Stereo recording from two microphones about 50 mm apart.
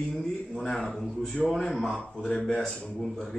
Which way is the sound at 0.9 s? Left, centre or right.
Centre.